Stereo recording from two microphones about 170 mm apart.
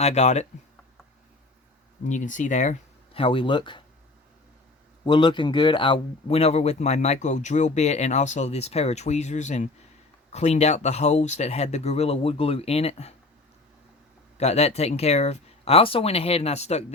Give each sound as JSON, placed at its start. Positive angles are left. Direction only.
{"t": 0.0, "sound": "speech", "side_deg": 40}
{"t": 2.0, "sound": "speech", "side_deg": 45}
{"t": 5.0, "sound": "speech", "side_deg": 25}
{"t": 14.3, "sound": "speech", "side_deg": 40}